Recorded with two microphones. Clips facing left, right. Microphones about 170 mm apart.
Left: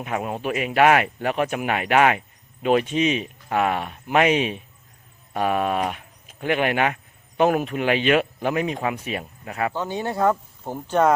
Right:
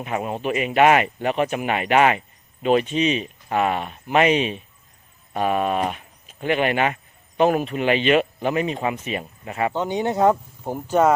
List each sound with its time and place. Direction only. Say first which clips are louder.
0.0 s speech: right 1 dB; centre (ahead or behind)
9.7 s speech: right 4 dB; 20° right (ahead or behind)